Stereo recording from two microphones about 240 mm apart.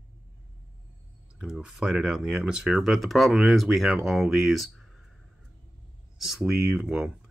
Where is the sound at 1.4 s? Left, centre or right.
Centre.